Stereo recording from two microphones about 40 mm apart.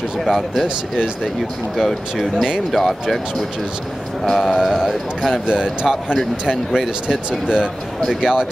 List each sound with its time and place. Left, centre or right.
0.2 s speech: centre
2.1 s speech: centre
2.7 s speech: centre
5.5 s a man's voice: centre